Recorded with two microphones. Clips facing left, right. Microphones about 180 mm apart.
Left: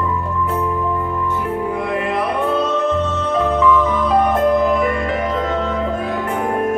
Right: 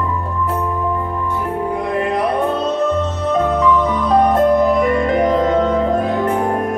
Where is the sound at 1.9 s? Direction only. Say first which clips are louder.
Right 4 dB; 40° right (ahead or behind).